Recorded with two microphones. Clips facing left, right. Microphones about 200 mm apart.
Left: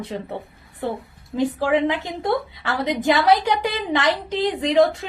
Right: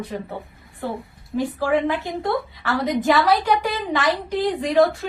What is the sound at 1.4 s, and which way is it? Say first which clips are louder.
A woman's voice: left 1 dB; 20° left (ahead or behind).